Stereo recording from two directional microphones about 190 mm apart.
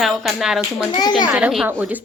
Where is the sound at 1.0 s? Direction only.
20° left (ahead or behind).